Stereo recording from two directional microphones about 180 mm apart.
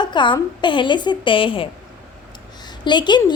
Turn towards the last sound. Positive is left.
turn(degrees=25)  # may be behind; listen again after turning